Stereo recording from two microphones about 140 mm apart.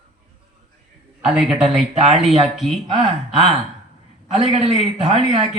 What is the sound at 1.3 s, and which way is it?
Speech, 5° right (ahead or behind).